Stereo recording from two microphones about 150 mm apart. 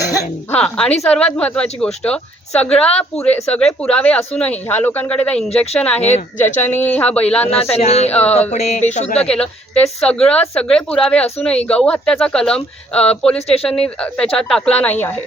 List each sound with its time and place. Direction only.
0.5 s speech: 5° left (ahead or behind)
6.0 s speech: 45° left (ahead or behind)
6.6 s speech: 10° left (ahead or behind)
7.5 s speech: 40° left (ahead or behind)
9.2 s speech: 5° left (ahead or behind)